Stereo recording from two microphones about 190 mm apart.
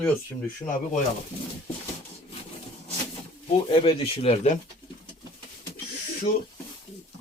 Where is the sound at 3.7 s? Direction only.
30° left (ahead or behind).